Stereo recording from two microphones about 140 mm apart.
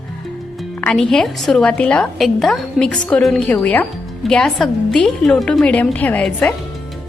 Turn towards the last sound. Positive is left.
turn(degrees=10)  # may be behind; listen again after turning